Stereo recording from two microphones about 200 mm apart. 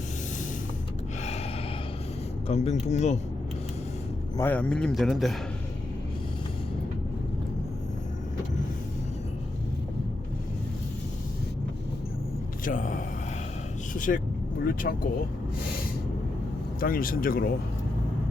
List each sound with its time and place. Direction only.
2.5 s speech: 35° left (ahead or behind)
4.4 s a man's voice: 10° left (ahead or behind)
12.6 s speech: 40° left (ahead or behind)
16.8 s speech: 45° left (ahead or behind)